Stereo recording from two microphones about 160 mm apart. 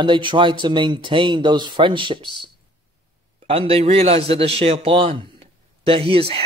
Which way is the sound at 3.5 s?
35° right (ahead or behind).